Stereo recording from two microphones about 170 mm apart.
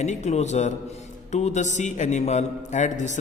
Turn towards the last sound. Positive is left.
turn(degrees=45)  # may be behind; listen again after turning